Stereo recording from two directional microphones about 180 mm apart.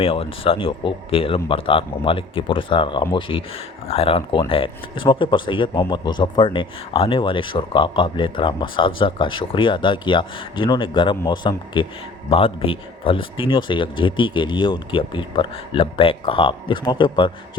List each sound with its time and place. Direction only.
0.0 s speech: 30° left (ahead or behind)